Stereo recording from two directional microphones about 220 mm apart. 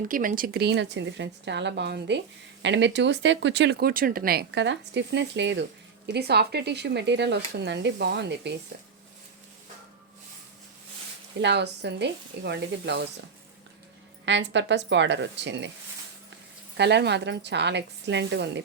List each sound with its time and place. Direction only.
0.1 s speech: 40° right (ahead or behind)
11.3 s speech: 50° right (ahead or behind)
14.3 s speech: 55° right (ahead or behind)
16.7 s speech: 50° right (ahead or behind)